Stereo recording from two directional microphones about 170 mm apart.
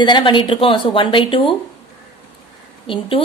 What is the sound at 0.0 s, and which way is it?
A woman's voice, 25° left (ahead or behind).